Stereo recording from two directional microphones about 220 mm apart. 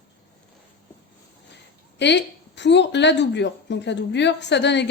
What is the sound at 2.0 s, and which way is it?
A woman's voice, 50° left (ahead or behind).